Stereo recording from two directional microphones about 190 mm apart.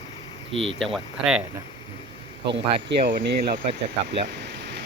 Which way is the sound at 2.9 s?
60° right (ahead or behind).